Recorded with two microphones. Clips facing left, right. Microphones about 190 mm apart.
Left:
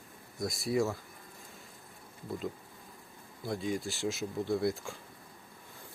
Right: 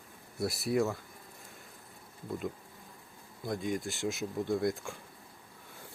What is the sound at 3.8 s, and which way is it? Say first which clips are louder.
Speech: even; 20° right (ahead or behind).